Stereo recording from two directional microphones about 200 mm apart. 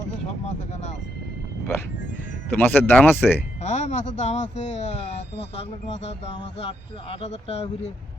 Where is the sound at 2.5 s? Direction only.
10° left (ahead or behind).